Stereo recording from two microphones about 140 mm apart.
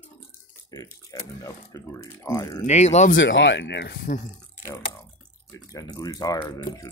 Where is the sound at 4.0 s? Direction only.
90° left.